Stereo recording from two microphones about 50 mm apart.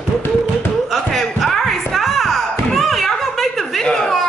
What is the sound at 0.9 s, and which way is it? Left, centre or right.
Music, centre.